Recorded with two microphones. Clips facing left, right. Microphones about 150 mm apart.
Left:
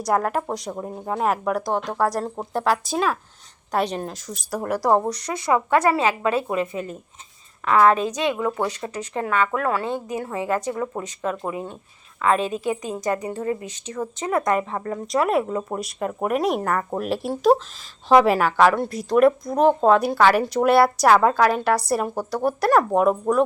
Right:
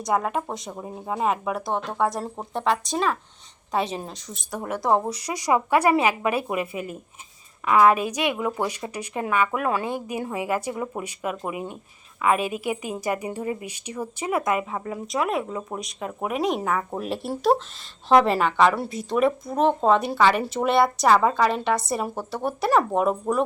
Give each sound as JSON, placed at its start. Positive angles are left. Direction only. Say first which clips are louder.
{"t": 0.0, "sound": "a woman's voice", "louder": "left 2 dB", "side_deg": 0}